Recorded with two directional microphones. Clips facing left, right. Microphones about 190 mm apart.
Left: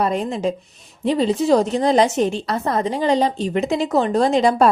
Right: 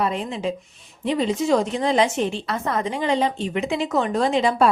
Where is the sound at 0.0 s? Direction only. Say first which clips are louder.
Left 4 dB; 40° left (ahead or behind).